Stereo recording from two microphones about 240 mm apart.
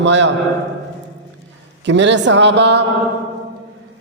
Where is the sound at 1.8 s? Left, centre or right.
Right.